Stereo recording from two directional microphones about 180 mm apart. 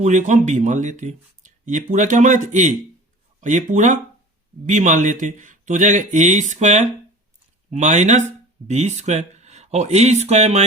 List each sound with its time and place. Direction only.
0.0 s speech: 40° right (ahead or behind)